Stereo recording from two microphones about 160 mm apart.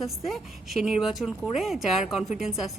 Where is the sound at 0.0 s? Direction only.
Centre (ahead or behind).